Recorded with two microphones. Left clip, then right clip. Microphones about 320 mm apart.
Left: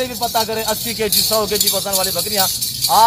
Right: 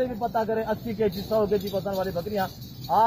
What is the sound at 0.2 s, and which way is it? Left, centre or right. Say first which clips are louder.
Speech: left 7 dB; centre.